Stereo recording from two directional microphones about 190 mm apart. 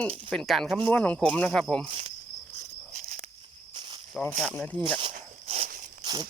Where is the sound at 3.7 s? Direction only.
25° right (ahead or behind).